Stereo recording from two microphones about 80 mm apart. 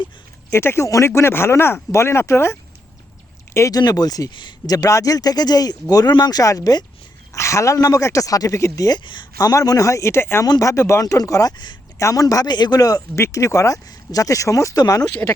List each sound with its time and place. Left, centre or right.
0.5 s speech: left
3.7 s speech: left
4.3 s speech: left
4.7 s speech: left
10.4 s speech: left
11.5 s speech: left
11.9 s speech: left